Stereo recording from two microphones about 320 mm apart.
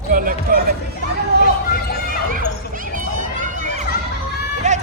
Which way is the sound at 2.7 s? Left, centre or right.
Right.